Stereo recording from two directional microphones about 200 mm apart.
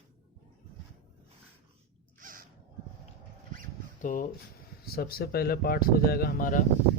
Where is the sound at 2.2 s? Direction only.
45° right (ahead or behind).